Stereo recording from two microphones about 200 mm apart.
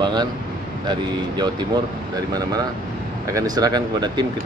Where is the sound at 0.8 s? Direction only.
20° right (ahead or behind).